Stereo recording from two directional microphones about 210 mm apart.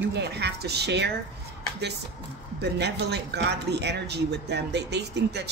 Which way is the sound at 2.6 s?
50° right (ahead or behind).